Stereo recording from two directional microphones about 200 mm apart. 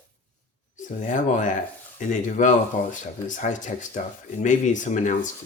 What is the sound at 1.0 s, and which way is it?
Speech, 40° left (ahead or behind).